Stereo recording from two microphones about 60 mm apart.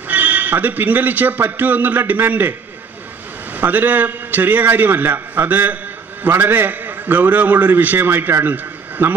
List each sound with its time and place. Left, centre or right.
0.1 s a man's voice: right
3.5 s a man's voice: right
9.0 s a man's voice: right